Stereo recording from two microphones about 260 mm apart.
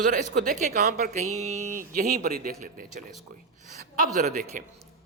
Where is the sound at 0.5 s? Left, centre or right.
Right.